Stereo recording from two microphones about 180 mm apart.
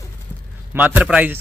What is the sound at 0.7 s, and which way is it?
Speech, 10° right (ahead or behind).